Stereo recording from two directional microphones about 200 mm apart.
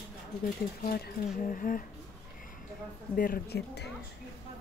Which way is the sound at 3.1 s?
45° left (ahead or behind).